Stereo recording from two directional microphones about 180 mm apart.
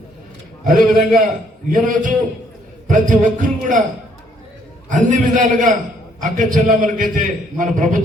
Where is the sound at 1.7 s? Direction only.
45° right (ahead or behind).